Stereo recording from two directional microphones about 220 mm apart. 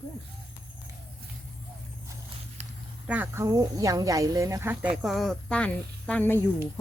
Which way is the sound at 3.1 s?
10° right (ahead or behind).